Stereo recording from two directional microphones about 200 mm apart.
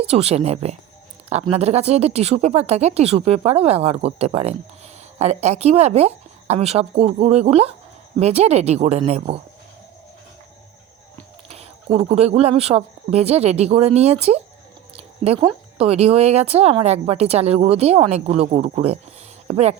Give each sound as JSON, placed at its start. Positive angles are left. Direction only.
{"t": 0.1, "sound": "speech", "side_deg": -30}
{"t": 11.4, "sound": "speech", "side_deg": -30}